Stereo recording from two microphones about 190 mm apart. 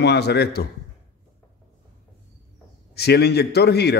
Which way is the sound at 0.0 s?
60° left (ahead or behind).